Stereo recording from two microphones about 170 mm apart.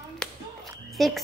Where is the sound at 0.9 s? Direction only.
Centre (ahead or behind).